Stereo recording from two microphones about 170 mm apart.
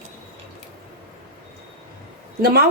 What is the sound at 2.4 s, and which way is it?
Speech, 65° right (ahead or behind).